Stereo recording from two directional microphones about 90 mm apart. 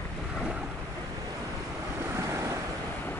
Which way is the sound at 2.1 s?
35° right (ahead or behind).